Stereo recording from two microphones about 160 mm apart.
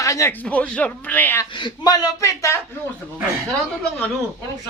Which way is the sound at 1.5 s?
30° left (ahead or behind).